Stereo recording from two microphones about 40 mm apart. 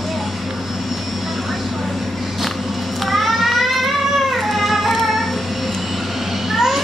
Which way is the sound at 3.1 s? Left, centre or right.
Centre.